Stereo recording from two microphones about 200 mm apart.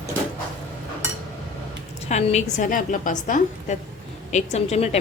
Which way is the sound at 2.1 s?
35° left (ahead or behind).